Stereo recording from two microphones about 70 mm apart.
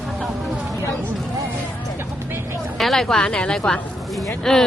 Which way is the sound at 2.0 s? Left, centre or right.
Right.